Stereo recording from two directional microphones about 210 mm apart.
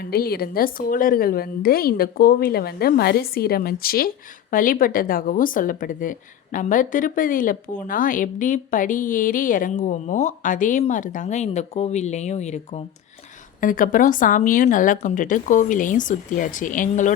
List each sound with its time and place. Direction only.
0.0 s a woman's voice: 45° left (ahead or behind)